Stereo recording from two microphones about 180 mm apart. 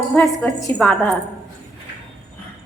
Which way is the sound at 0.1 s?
5° left (ahead or behind).